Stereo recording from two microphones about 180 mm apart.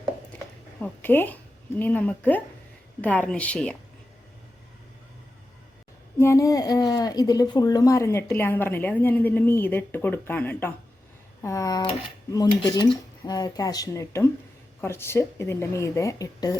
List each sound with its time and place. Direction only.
0.8 s a woman's voice: 10° left (ahead or behind)
6.1 s a woman's voice: 15° left (ahead or behind)